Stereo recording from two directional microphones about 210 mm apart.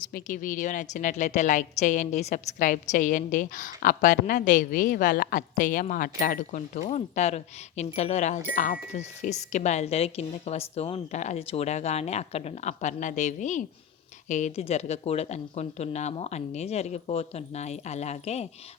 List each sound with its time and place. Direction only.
0.1 s a woman's voice: 40° left (ahead or behind)